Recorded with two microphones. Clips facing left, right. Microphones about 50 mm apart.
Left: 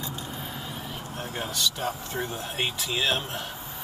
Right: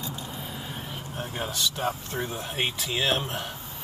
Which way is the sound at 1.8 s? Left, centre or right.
Centre.